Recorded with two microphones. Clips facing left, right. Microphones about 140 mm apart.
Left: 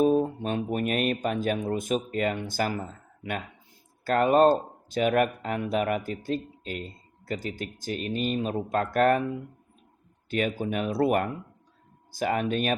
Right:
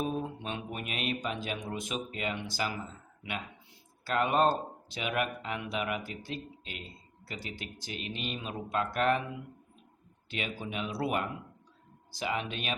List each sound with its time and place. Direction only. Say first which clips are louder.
0.0 s speech: left 11 dB; 40° left (ahead or behind)
10.2 s speech: left 10 dB; 45° left (ahead or behind)